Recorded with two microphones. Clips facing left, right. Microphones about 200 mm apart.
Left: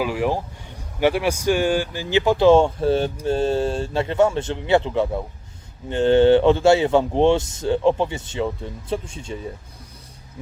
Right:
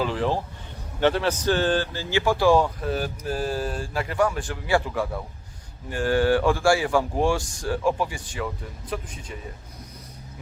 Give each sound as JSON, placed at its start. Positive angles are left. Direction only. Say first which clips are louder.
{"t": 0.0, "sound": "speech", "louder": "left 2 dB", "side_deg": 10}